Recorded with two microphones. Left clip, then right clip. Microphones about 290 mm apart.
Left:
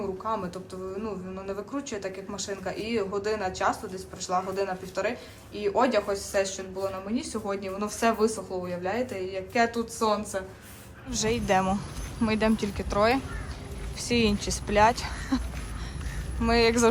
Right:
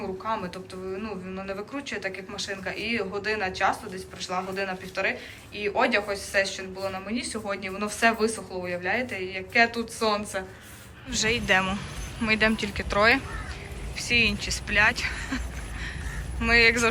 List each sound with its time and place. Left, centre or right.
0.3 s speech: centre
16.4 s speech: centre